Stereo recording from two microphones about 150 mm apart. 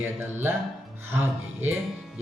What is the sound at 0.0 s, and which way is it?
Speech, 15° right (ahead or behind).